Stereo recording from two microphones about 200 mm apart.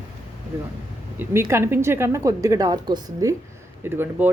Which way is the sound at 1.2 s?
10° right (ahead or behind).